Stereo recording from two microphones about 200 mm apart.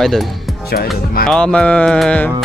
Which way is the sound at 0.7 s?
55° left (ahead or behind).